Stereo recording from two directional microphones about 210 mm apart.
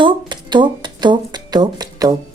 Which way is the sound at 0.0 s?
20° right (ahead or behind).